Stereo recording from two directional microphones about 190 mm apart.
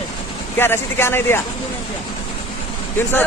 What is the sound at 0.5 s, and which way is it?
Speech, 10° left (ahead or behind).